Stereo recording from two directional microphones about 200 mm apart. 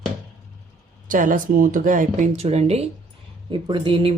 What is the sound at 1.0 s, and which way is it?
Speech, 40° right (ahead or behind).